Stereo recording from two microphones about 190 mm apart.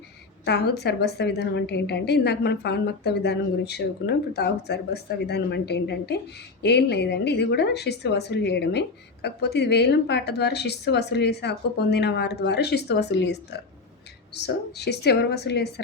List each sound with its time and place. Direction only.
0.4 s a woman's voice: 60° left (ahead or behind)